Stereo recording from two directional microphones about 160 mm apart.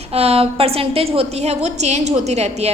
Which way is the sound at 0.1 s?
40° right (ahead or behind).